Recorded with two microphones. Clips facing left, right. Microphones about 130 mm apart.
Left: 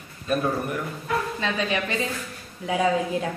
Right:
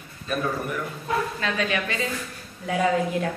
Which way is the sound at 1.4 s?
25° left (ahead or behind).